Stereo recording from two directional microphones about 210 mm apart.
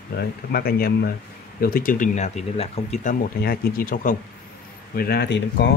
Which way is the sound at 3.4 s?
45° left (ahead or behind).